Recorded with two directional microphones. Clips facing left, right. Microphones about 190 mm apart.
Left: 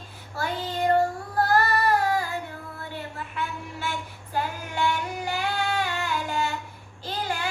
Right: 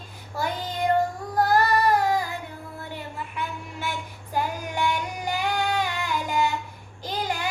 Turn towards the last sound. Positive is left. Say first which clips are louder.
# right 1 dB
turn(degrees=-15)  # may be behind; listen again after turning